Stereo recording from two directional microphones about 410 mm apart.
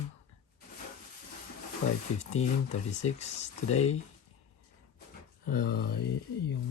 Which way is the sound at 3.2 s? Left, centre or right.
Centre.